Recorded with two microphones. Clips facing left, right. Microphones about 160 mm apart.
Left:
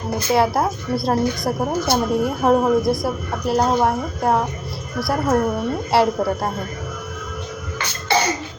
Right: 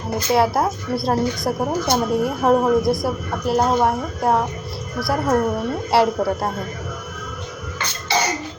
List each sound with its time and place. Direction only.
0.1 s a woman's voice: centre (ahead or behind)
8.1 s cough: 55° left (ahead or behind)